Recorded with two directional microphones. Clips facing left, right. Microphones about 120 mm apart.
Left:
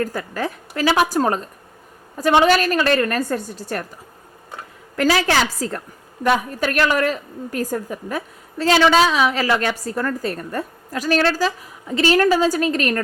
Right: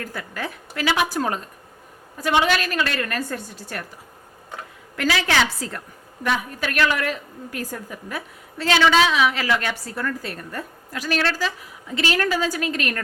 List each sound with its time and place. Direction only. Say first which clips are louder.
0.0 s a woman's voice: left 7 dB; 40° left (ahead or behind)
4.9 s a woman's voice: left 4 dB; 40° left (ahead or behind)